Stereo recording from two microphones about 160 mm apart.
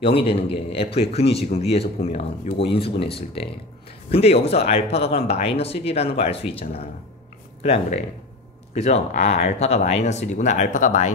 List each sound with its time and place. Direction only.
0.0 s speech: 35° left (ahead or behind)
7.6 s speech: 40° left (ahead or behind)